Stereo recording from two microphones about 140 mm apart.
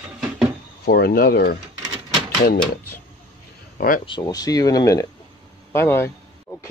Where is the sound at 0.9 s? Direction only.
90° left.